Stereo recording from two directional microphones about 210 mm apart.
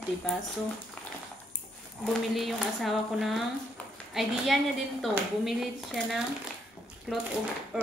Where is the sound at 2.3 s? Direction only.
Centre (ahead or behind).